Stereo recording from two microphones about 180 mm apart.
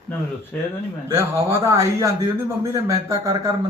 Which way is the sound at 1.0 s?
15° right (ahead or behind).